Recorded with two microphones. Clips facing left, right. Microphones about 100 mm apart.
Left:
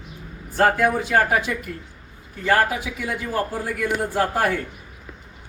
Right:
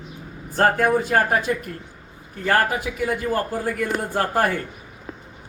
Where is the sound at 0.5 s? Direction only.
45° right (ahead or behind).